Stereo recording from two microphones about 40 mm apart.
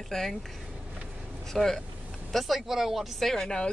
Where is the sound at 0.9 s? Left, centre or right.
Right.